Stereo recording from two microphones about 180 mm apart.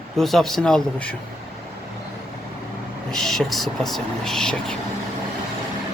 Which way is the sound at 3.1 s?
Centre (ahead or behind).